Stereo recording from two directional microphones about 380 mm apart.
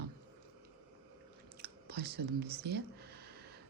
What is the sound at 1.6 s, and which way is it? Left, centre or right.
Speech, right.